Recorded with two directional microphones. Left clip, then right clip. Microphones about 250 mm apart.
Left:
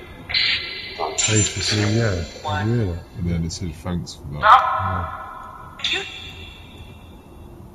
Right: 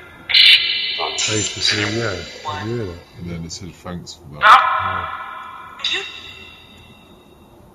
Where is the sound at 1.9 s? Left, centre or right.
Centre.